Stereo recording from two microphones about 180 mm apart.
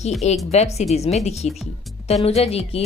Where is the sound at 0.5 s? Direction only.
35° left (ahead or behind).